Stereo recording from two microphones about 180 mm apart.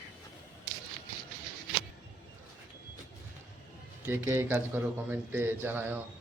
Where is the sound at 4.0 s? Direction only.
15° right (ahead or behind).